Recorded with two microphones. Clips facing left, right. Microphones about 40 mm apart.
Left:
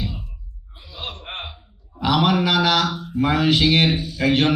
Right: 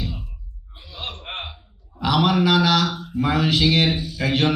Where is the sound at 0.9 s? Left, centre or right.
Centre.